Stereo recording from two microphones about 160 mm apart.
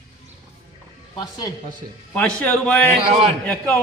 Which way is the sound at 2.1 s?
10° left (ahead or behind).